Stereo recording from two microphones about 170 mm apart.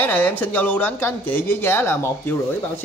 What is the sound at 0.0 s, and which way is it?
Speech, 10° left (ahead or behind).